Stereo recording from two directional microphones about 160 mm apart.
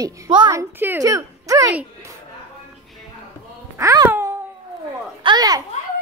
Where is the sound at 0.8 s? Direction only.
15° right (ahead or behind).